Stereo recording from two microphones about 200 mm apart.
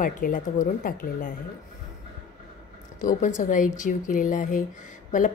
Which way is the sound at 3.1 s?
40° left (ahead or behind).